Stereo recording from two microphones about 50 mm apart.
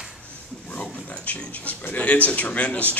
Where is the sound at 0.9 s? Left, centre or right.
Left.